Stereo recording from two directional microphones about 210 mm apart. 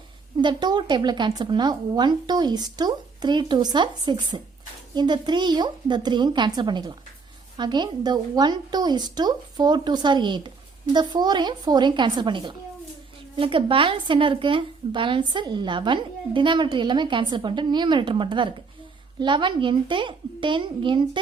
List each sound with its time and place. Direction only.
0.4 s speech: 20° right (ahead or behind)